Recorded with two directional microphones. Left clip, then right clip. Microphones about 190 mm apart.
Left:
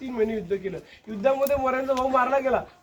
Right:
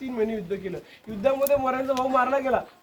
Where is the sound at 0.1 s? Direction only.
5° left (ahead or behind).